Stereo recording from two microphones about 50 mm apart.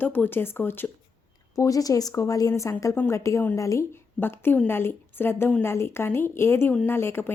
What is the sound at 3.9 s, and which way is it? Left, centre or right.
A woman's voice, left.